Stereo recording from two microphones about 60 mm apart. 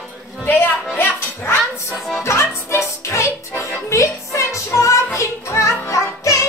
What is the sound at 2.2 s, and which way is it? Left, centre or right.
Music, left.